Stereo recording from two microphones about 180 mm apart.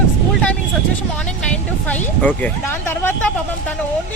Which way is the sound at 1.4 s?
5° left (ahead or behind).